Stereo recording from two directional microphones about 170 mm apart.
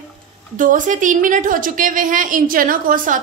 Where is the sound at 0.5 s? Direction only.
50° right (ahead or behind).